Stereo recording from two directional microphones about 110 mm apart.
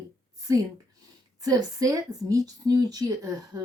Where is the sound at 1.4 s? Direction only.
35° right (ahead or behind).